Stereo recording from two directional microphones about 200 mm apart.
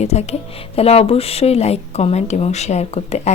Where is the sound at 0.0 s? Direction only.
35° left (ahead or behind).